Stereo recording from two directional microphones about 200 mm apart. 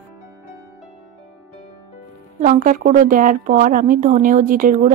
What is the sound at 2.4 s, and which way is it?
Speech, 40° right (ahead or behind).